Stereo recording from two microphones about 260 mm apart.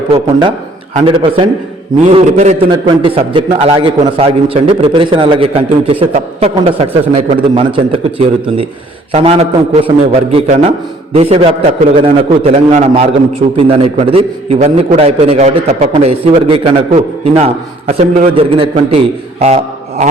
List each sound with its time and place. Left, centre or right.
0.9 s a man's voice: centre